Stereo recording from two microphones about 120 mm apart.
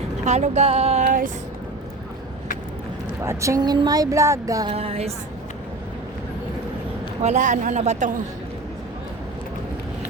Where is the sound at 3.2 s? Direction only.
25° right (ahead or behind).